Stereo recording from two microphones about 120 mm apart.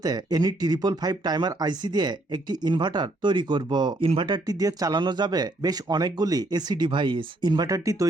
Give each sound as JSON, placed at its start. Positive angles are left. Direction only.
{"t": 0.0, "sound": "speech", "side_deg": -35}
{"t": 4.4, "sound": "speech", "side_deg": -30}